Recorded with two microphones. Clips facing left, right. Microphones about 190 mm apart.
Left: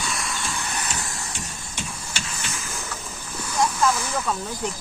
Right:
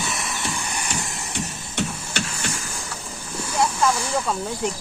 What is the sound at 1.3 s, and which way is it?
Music, 65° right (ahead or behind).